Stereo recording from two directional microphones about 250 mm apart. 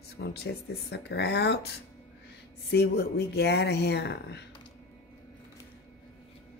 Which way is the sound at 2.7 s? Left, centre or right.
Left.